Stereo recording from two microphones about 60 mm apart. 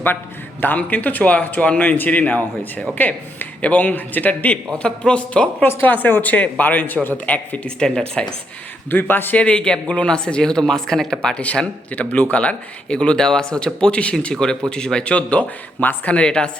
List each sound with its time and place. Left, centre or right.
0.6 s a man's voice: left
5.6 s a man's voice: left; by 8.3 s centre
8.9 s a man's voice: left
9.3 s a man's voice: centre